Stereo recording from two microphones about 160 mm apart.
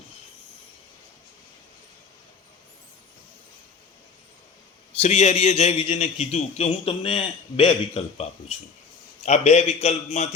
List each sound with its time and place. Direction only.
4.9 s a man's voice: 40° left (ahead or behind)